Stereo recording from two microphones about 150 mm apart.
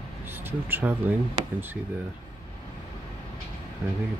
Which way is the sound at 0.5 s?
15° right (ahead or behind).